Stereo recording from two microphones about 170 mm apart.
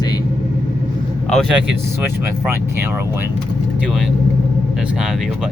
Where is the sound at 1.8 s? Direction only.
15° right (ahead or behind).